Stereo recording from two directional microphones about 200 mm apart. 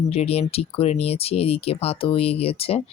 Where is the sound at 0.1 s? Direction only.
30° left (ahead or behind).